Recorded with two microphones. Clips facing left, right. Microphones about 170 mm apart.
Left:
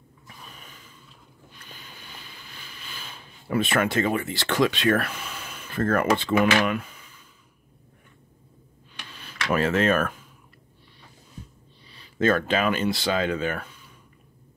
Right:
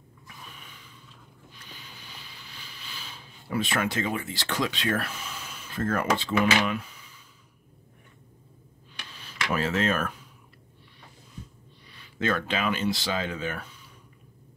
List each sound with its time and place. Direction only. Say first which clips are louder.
0.5 s a sound: left 1 dB; 40° left (ahead or behind)
1.5 s boat: left 2 dB; 50° left (ahead or behind)
9.2 s speech: left 4 dB; 60° left (ahead or behind)
12.2 s speech: left 6 dB; 45° left (ahead or behind)